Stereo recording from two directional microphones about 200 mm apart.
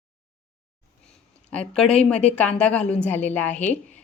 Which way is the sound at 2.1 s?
5° left (ahead or behind).